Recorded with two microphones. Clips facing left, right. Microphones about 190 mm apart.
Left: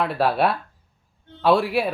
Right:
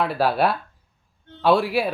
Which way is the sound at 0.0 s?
Centre (ahead or behind).